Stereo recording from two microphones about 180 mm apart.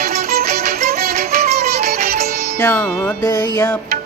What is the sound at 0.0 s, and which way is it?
Music, 55° right (ahead or behind).